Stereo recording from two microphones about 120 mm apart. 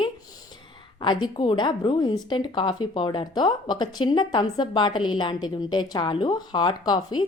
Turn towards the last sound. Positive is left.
turn(degrees=35)  # may be behind; listen again after turning